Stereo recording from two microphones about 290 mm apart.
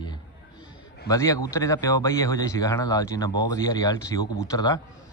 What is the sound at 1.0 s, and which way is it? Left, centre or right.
Speech, centre.